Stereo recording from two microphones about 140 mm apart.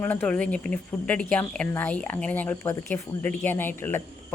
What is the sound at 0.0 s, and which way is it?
A woman's voice, 15° left (ahead or behind).